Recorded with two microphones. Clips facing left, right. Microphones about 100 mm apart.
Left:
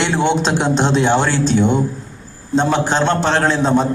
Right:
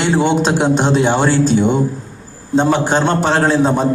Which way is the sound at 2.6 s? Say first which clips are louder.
Right 2 dB; 10° right (ahead or behind).